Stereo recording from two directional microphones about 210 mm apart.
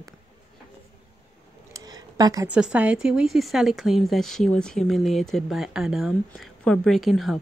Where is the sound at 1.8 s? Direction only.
20° right (ahead or behind).